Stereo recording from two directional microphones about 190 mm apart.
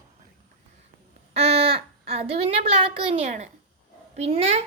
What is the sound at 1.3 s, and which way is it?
A woman's voice, 30° right (ahead or behind).